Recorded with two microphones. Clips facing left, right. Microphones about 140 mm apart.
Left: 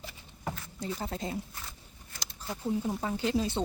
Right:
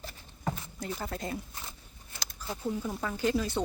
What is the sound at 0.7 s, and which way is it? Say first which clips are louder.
Speech: left 1 dB; 25° left (ahead or behind).